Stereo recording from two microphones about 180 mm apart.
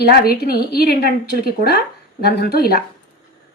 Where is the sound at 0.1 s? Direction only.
60° left (ahead or behind).